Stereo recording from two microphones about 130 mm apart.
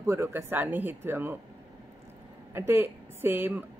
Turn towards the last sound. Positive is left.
turn(degrees=-15)  # may be behind; listen again after turning